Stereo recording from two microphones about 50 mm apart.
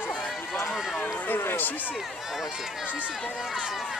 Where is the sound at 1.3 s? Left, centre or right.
Left.